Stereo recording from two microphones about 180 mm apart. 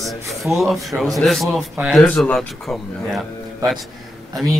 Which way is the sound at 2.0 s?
10° left (ahead or behind).